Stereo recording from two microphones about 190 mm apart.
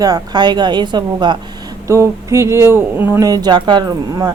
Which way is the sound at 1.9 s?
15° right (ahead or behind).